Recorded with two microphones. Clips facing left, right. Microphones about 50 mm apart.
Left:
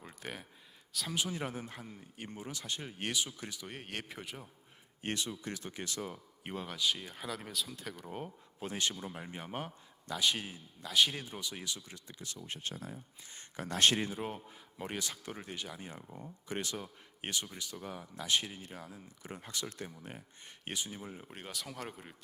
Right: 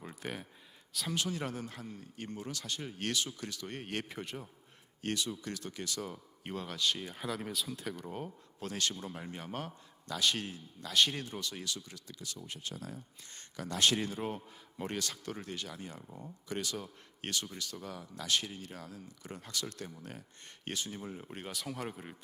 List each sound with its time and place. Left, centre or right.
0.0 s a sound: centre
1.1 s speech: centre
5.0 s speech: left
6.1 s speech: centre
12.5 s speech: left
14.2 s speech: centre
16.0 s speech: centre
16.5 s speech: left; by 22.1 s centre